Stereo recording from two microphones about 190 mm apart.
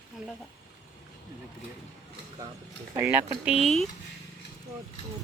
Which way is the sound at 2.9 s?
15° right (ahead or behind).